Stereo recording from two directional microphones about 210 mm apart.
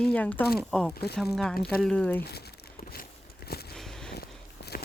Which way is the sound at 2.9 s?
45° left (ahead or behind).